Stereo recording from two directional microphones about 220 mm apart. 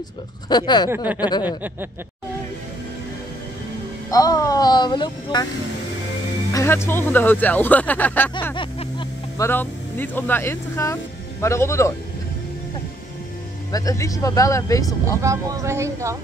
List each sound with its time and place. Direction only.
0.5 s speech: 20° left (ahead or behind)
0.8 s speech: 10° right (ahead or behind)
4.1 s speech: 15° left (ahead or behind)
6.5 s speech: 10° left (ahead or behind)
8.5 s music: 20° left (ahead or behind)
9.5 s speech: 10° left (ahead or behind)
13.7 s speech: 15° left (ahead or behind)
15.2 s speech: 15° right (ahead or behind)